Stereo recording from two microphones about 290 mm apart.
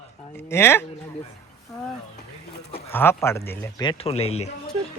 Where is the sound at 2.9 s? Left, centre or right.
Centre.